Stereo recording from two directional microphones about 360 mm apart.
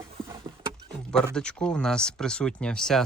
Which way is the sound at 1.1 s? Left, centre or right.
Centre.